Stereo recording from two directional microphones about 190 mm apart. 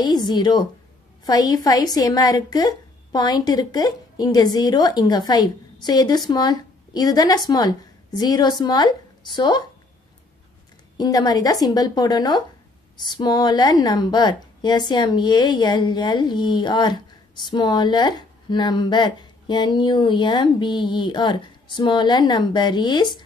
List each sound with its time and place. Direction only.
0.0 s a woman's voice: 20° left (ahead or behind)
11.0 s a woman's voice: 20° left (ahead or behind)